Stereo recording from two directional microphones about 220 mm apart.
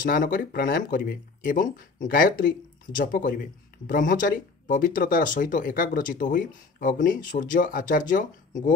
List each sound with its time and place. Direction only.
0.0 s speech: 40° left (ahead or behind)